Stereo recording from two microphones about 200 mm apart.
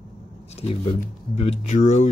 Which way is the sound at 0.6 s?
30° left (ahead or behind).